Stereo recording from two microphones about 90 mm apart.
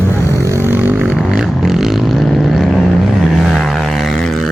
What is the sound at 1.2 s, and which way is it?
Vehicle, 5° left (ahead or behind).